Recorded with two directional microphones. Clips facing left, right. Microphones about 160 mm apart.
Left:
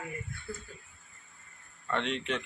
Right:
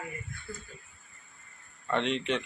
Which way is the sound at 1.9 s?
Centre (ahead or behind).